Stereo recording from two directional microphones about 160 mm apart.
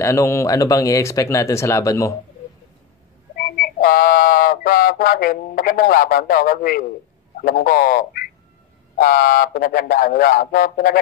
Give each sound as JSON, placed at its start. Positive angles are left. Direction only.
{"t": 0.0, "sound": "speech", "side_deg": 20}
{"t": 3.3, "sound": "frog", "side_deg": 65}
{"t": 7.4, "sound": "a sound", "side_deg": 65}